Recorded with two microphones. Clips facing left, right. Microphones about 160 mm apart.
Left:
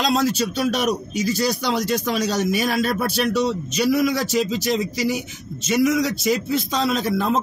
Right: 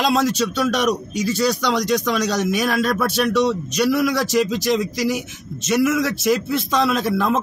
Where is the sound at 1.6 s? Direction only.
75° right (ahead or behind).